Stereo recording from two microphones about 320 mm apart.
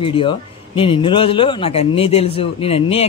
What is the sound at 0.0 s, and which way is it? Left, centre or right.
Speech, centre.